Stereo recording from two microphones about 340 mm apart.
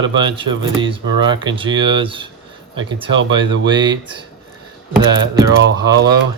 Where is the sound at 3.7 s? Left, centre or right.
Centre.